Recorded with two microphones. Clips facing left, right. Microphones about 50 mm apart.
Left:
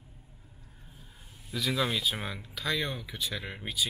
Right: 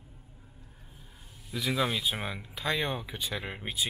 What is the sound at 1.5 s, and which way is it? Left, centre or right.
Speech, centre.